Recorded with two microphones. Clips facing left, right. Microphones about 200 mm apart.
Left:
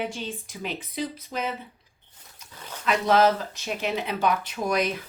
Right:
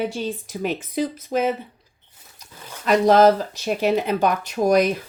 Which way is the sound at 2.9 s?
40° right (ahead or behind).